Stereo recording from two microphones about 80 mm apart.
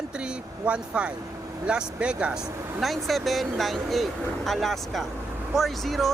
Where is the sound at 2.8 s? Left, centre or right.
Centre.